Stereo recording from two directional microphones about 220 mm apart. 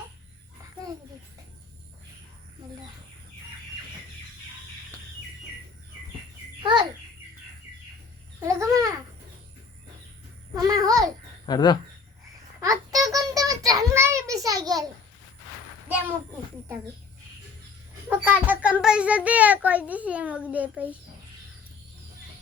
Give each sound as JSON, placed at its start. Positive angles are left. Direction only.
{"t": 6.6, "sound": "babbling", "side_deg": -20}
{"t": 8.4, "sound": "babbling", "side_deg": -15}
{"t": 10.5, "sound": "babbling", "side_deg": -15}
{"t": 11.4, "sound": "speech", "side_deg": 20}
{"t": 12.5, "sound": "a sound", "side_deg": -15}
{"t": 18.1, "sound": "a sound", "side_deg": -10}